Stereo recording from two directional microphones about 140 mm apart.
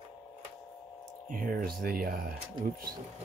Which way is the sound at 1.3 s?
80° right.